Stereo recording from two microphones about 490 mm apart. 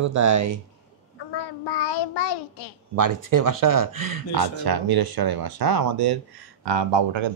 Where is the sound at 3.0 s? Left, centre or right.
Right.